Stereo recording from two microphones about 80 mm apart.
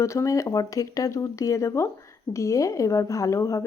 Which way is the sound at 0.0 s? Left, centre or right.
Left.